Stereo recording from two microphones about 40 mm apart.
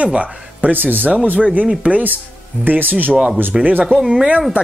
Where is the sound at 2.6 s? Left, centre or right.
Right.